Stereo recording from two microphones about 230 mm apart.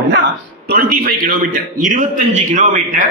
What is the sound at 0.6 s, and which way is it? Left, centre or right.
A man's voice, right.